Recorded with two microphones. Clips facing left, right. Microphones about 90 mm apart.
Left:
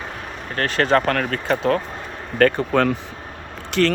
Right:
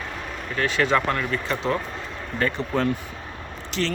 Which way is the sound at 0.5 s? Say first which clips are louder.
Left 3 dB; 50° left (ahead or behind).